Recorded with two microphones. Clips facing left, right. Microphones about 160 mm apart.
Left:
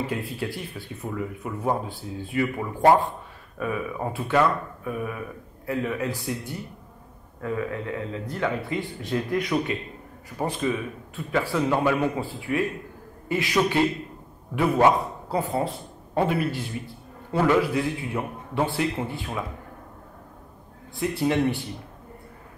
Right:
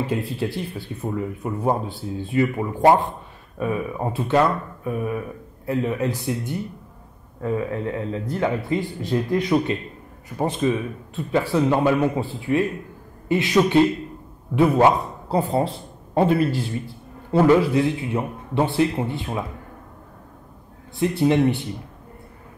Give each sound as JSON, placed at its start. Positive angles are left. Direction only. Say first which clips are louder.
{"t": 0.2, "sound": "a man's voice", "louder": "right 5 dB", "side_deg": -30}
{"t": 21.0, "sound": "speech", "louder": "right 5 dB", "side_deg": -25}